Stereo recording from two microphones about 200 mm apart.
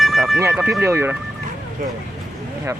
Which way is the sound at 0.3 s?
10° right (ahead or behind).